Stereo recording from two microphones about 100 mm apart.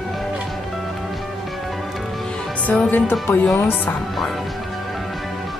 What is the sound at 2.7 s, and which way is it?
Speech, 15° left (ahead or behind).